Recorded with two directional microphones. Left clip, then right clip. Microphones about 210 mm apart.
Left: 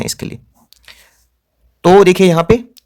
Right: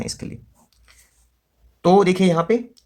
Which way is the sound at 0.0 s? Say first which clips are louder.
Left 8 dB; 40° left (ahead or behind).